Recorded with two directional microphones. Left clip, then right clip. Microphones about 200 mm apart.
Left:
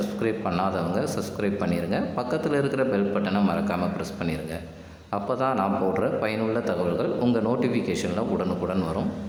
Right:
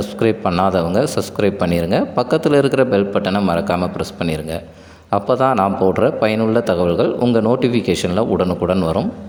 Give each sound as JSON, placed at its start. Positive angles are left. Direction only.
{"t": 0.0, "sound": "a man's voice", "side_deg": -40}
{"t": 7.2, "sound": "a man's voice", "side_deg": -30}